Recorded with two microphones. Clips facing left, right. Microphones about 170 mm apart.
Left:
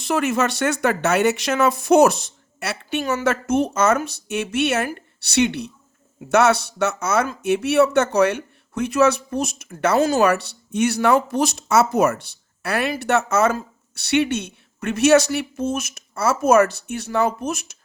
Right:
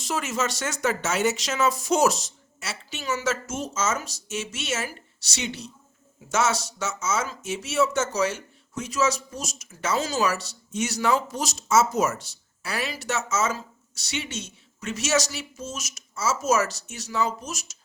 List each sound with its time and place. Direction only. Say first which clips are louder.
0.0 s speech: left 7 dB; 60° left (ahead or behind)